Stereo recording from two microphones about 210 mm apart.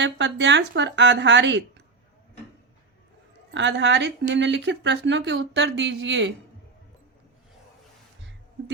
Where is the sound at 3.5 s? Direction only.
60° right (ahead or behind).